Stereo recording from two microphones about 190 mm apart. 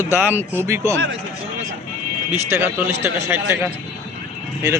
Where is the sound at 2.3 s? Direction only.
10° right (ahead or behind).